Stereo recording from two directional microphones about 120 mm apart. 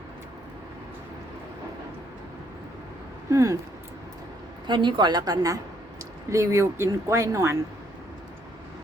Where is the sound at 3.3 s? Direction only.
25° right (ahead or behind).